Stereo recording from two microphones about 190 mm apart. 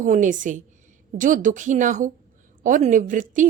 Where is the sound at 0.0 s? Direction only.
40° right (ahead or behind).